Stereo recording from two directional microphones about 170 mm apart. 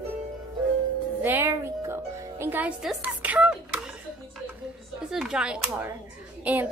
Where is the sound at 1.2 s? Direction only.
15° right (ahead or behind).